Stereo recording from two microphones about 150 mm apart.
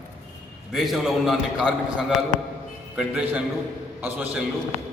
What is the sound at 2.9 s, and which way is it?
A man's voice, 5° right (ahead or behind).